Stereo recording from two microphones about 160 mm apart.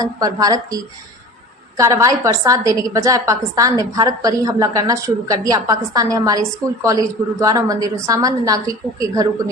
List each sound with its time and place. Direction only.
0.0 s a woman's voice: 25° right (ahead or behind)